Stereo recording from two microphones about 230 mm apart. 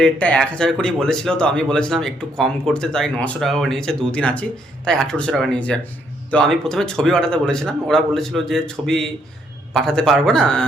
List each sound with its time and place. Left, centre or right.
0.0 s a man's voice: centre